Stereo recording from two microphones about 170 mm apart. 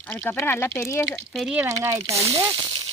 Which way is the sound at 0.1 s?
10° left (ahead or behind).